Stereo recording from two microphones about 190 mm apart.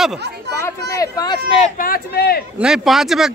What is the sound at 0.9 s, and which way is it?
Speech, 20° left (ahead or behind).